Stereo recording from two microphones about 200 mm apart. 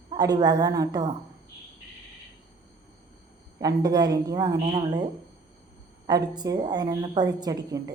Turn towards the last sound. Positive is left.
turn(degrees=-20)  # may be behind; listen again after turning